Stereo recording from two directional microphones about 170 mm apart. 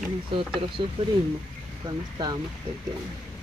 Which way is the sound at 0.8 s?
30° right (ahead or behind).